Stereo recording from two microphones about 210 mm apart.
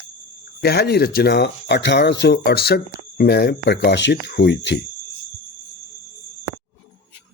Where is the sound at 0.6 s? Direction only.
50° left (ahead or behind).